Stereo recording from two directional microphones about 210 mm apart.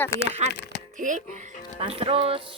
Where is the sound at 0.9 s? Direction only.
40° right (ahead or behind).